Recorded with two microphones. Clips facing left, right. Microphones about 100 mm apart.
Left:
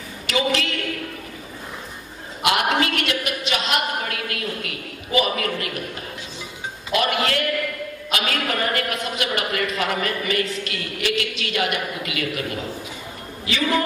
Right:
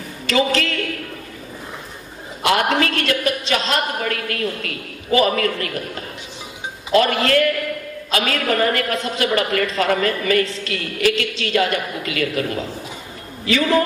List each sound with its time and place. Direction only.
0.3 s a woman's voice: 35° right (ahead or behind)
2.4 s a woman's voice: 35° right (ahead or behind)
6.9 s a woman's voice: 35° right (ahead or behind)